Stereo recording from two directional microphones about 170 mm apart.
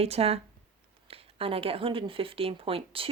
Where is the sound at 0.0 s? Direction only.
35° right (ahead or behind).